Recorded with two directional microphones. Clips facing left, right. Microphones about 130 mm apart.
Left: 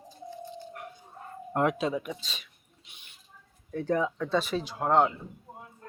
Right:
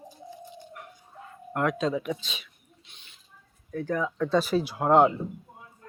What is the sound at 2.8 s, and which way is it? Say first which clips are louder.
Rodents: left 2 dB; 10° left (ahead or behind).